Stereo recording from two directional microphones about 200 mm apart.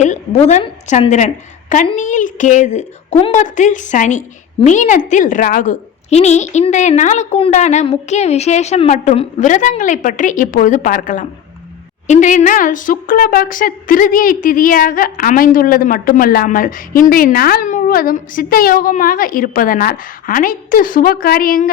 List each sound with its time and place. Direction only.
0.0 s a woman's voice: 35° left (ahead or behind)